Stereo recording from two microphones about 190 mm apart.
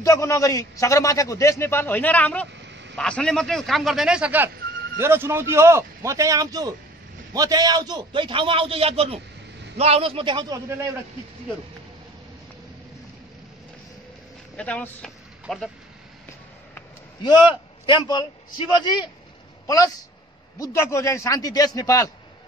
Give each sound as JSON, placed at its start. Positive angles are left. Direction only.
{"t": 0.0, "sound": "a man's voice", "side_deg": 15}
{"t": 14.6, "sound": "a man's voice", "side_deg": 5}
{"t": 17.2, "sound": "a man's voice", "side_deg": 25}
{"t": 20.5, "sound": "a man's voice", "side_deg": 15}